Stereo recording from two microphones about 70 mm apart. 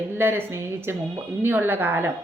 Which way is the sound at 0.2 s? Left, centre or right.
Right.